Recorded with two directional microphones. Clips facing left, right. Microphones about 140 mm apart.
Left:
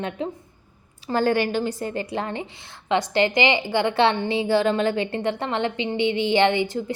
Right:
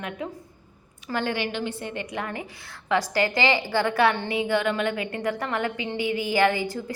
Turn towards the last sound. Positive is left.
turn(degrees=25)  # may be behind; listen again after turning